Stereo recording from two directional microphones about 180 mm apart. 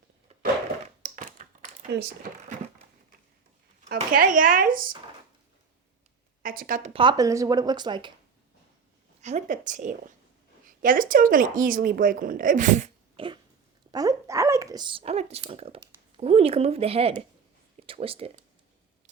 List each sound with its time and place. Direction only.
1.0 s a sound: 45° right (ahead or behind)
3.8 s a woman's voice: 50° right (ahead or behind)
6.4 s a woman's voice: 55° right (ahead or behind)
6.9 s speech: 25° right (ahead or behind)
9.2 s a woman's voice: 40° right (ahead or behind)
13.1 s a sound: 30° right (ahead or behind)
13.9 s speech: 20° right (ahead or behind)